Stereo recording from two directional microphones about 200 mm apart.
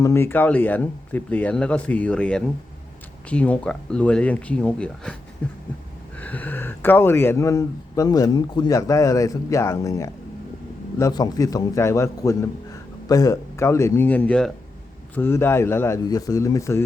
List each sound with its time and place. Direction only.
0.0 s speech: 10° left (ahead or behind)